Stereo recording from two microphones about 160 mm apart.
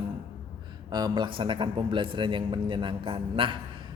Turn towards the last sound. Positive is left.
turn(degrees=-30)  # may be behind; listen again after turning